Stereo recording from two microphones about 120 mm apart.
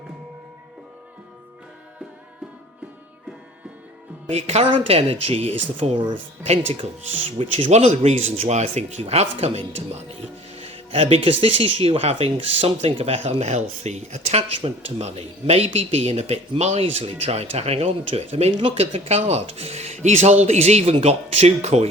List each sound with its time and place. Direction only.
4.3 s speech: 65° right (ahead or behind); by 6.1 s 45° right (ahead or behind)
6.4 s speech: 55° right (ahead or behind)